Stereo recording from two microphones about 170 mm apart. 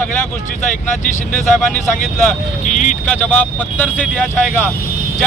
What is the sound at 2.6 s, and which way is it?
Speech, 45° left (ahead or behind).